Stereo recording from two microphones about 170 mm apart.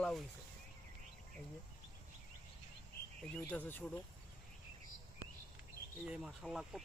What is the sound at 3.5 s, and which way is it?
Speech, 10° left (ahead or behind).